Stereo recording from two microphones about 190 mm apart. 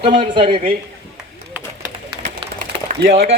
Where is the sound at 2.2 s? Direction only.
40° right (ahead or behind).